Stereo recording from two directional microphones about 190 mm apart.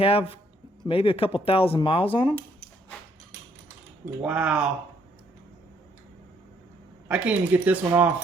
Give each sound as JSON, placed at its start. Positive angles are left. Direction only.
{"t": 0.0, "sound": "speech", "side_deg": 30}
{"t": 4.2, "sound": "speech", "side_deg": -5}
{"t": 7.1, "sound": "speech", "side_deg": -5}